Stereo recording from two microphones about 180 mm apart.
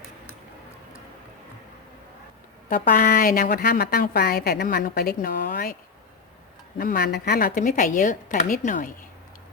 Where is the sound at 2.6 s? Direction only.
50° left (ahead or behind).